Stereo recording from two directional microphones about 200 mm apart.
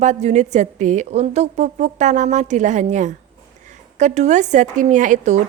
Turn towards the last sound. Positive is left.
turn(degrees=-35)  # may be behind; listen again after turning